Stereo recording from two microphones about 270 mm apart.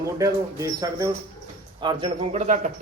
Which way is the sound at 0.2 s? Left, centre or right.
Centre.